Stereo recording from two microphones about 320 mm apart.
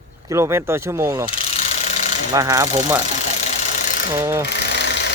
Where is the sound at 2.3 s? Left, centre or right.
Centre.